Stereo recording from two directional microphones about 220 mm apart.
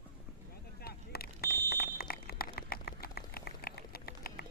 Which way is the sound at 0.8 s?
45° left (ahead or behind).